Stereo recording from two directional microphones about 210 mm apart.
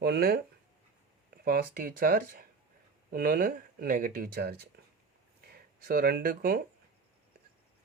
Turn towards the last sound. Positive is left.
turn(degrees=-45)  # may be behind; listen again after turning